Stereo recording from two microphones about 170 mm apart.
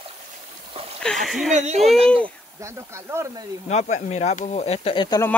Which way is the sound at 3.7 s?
45° left (ahead or behind).